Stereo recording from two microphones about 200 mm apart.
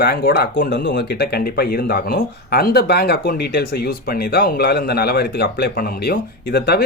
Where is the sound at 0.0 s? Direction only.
50° left (ahead or behind).